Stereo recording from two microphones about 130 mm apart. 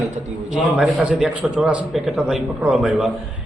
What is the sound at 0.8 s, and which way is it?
A man's voice, 10° right (ahead or behind).